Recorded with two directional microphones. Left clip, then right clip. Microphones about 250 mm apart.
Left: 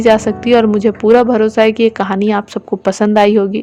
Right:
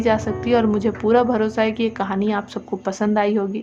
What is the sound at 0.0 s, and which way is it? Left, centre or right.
A woman's voice, left.